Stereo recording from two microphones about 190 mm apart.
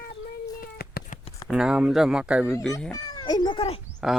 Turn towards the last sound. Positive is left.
turn(degrees=0)  # may be behind; listen again after turning